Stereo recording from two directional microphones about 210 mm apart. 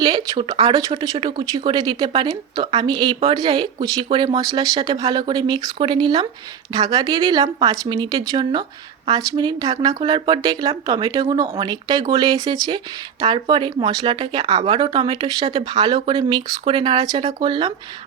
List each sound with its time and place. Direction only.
0.0 s speech: 20° right (ahead or behind)